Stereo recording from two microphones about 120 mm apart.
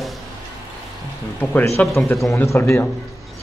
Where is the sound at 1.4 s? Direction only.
15° left (ahead or behind).